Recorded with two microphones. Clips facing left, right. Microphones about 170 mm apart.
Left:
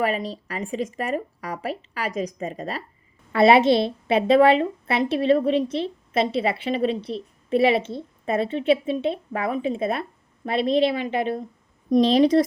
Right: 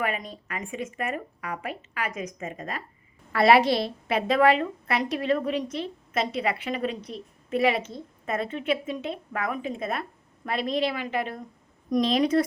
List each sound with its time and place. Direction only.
0.0 s a woman's voice: 30° left (ahead or behind)